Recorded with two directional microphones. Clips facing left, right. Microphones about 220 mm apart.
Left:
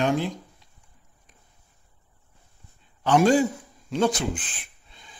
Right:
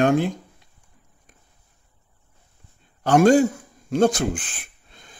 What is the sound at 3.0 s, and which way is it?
A man's voice, 45° right (ahead or behind).